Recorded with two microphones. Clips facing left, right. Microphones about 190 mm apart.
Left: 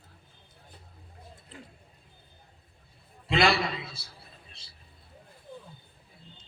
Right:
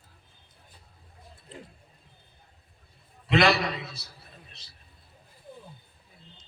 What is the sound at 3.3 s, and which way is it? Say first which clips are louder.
Speech: right 2 dB; 30° left (ahead or behind).